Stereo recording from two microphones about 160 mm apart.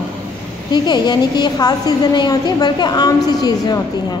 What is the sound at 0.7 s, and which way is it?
A woman's voice, 25° left (ahead or behind).